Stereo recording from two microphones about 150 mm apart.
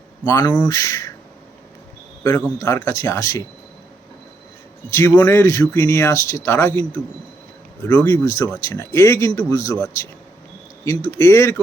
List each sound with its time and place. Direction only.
0.3 s speech: 20° left (ahead or behind)
2.6 s speech: 20° left (ahead or behind)
4.9 s speech: 20° left (ahead or behind)